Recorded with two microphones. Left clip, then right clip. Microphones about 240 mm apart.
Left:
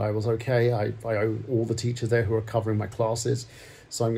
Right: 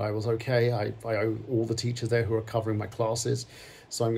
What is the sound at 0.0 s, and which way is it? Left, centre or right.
Speech, centre.